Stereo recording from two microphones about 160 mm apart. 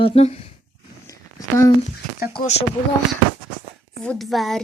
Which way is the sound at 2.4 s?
40° left (ahead or behind).